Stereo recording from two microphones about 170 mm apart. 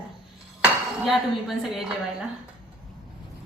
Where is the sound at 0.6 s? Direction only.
Centre (ahead or behind).